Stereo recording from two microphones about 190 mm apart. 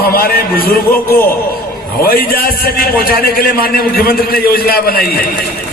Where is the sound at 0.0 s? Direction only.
50° left (ahead or behind).